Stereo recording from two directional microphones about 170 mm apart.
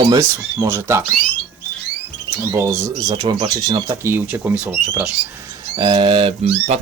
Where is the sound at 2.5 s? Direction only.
15° right (ahead or behind).